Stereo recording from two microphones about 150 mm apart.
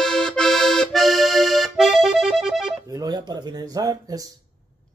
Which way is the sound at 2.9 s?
25° right (ahead or behind).